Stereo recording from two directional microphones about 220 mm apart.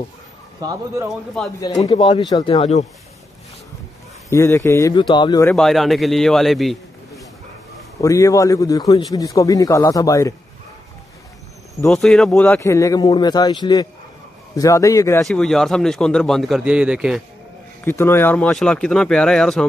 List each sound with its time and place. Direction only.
0.6 s speech: 15° right (ahead or behind)
1.6 s speech: 15° left (ahead or behind)
4.3 s speech: 15° left (ahead or behind)
5.6 s a man's voice: centre (ahead or behind)
8.0 s speech: 15° left (ahead or behind)
11.9 s speech: centre (ahead or behind)
15.2 s a man's voice: centre (ahead or behind)
17.8 s a man's voice: 10° left (ahead or behind)